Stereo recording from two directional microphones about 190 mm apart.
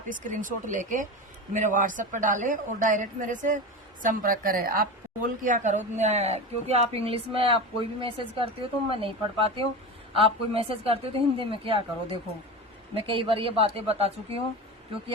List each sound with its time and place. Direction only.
0.1 s a woman's voice: 45° right (ahead or behind)